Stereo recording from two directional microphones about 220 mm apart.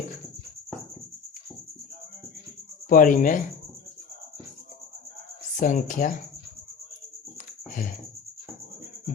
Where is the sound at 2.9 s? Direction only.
35° left (ahead or behind).